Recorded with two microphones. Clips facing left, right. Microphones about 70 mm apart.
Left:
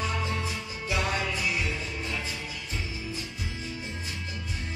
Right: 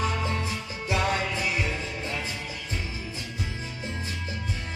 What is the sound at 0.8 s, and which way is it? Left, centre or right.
Music, right.